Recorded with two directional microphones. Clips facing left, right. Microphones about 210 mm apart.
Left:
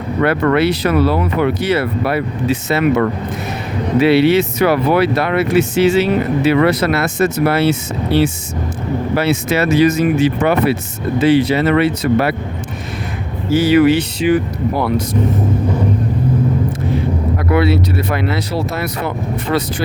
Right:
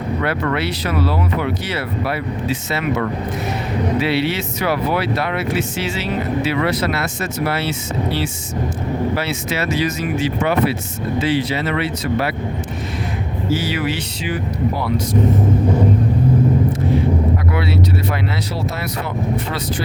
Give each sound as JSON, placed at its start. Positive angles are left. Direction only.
{"t": 0.2, "sound": "speech", "side_deg": 55}
{"t": 13.5, "sound": "speech", "side_deg": 55}
{"t": 17.5, "sound": "speech", "side_deg": 60}